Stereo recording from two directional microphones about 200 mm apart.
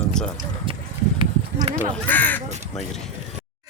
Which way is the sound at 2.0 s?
10° left (ahead or behind).